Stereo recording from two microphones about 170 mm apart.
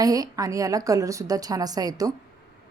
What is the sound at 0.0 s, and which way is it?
Speech, 20° right (ahead or behind).